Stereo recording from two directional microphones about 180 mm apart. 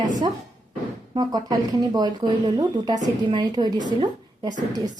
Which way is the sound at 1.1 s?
20° right (ahead or behind).